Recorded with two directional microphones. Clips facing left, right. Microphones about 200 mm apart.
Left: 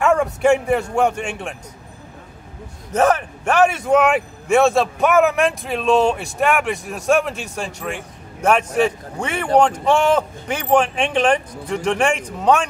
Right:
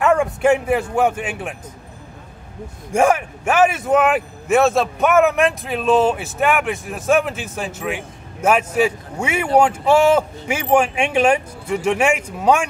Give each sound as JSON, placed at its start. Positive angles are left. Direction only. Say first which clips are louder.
{"t": 0.0, "sound": "a man's voice", "louder": "even", "side_deg": 0}
{"t": 2.9, "sound": "a man's voice", "louder": "right 1 dB", "side_deg": -10}